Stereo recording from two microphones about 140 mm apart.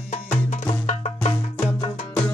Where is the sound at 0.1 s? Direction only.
55° left (ahead or behind).